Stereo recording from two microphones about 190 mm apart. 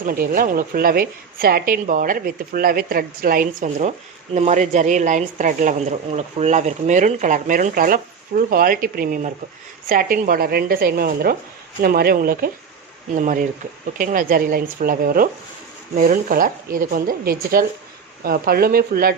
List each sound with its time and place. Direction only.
0.0 s a woman's voice: 50° right (ahead or behind)